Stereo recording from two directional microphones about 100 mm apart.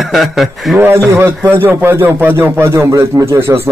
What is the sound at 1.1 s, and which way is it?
A man's voice, 25° right (ahead or behind).